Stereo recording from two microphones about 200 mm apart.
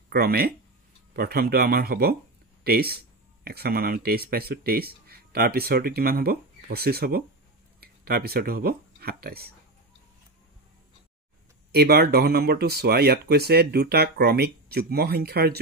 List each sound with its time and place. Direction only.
0.1 s speech: 50° right (ahead or behind)
11.7 s speech: 50° right (ahead or behind)